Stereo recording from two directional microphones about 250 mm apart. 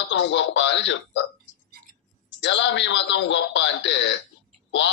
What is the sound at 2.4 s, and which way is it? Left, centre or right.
A man's voice, left.